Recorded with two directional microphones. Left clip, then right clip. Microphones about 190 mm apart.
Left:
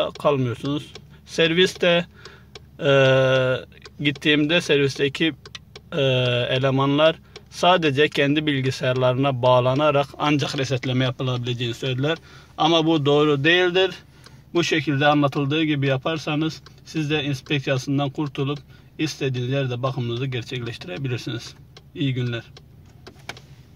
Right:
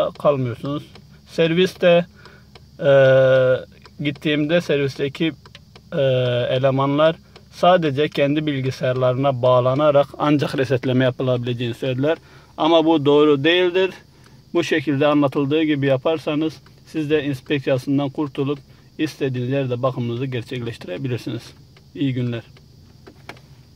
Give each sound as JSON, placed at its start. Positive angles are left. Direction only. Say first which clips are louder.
{"t": 0.0, "sound": "speech", "louder": "right 3 dB", "side_deg": -10}